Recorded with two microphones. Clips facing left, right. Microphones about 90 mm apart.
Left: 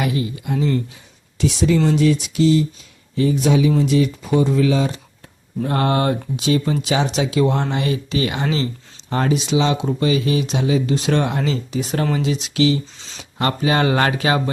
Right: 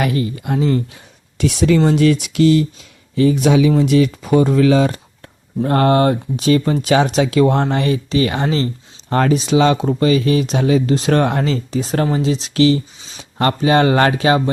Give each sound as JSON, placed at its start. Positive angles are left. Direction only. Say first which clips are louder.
{"t": 0.0, "sound": "speech", "louder": "right 3 dB", "side_deg": -50}
{"t": 3.2, "sound": "speech", "louder": "right 4 dB", "side_deg": -90}
{"t": 3.7, "sound": "speech", "louder": "right 3 dB", "side_deg": -65}
{"t": 5.6, "sound": "speech", "louder": "right 5 dB", "side_deg": -45}
{"t": 9.0, "sound": "speech", "louder": "right 5 dB", "side_deg": -55}
{"t": 9.3, "sound": "speech", "louder": "right 4 dB", "side_deg": -45}
{"t": 13.0, "sound": "speech", "louder": "even", "side_deg": -5}
{"t": 13.4, "sound": "speech", "louder": "right 4 dB", "side_deg": -35}